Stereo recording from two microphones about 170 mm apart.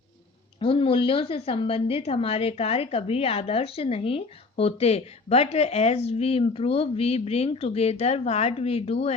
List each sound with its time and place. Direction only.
0.6 s a woman's voice: 30° left (ahead or behind)